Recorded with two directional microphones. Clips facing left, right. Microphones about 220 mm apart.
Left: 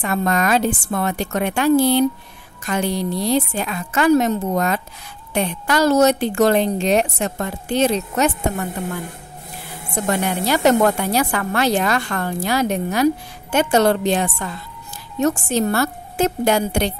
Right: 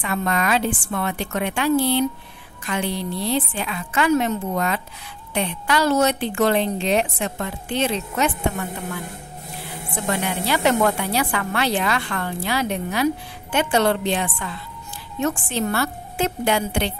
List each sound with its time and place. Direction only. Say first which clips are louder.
0.0 s a woman's voice: left 4 dB; 40° left (ahead or behind)
9.9 s a woman's voice: left 4 dB; 45° left (ahead or behind)